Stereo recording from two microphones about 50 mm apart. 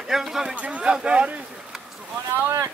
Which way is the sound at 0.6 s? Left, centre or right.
Right.